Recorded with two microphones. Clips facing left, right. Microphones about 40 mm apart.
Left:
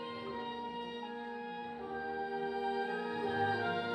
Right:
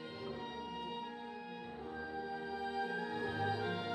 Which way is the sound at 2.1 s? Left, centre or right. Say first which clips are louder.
Left 6 dB; centre.